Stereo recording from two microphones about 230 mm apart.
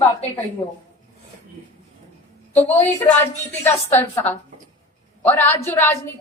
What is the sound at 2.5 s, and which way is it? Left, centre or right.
Speech, centre.